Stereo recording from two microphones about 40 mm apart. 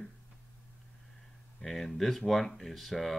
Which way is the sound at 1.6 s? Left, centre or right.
Centre.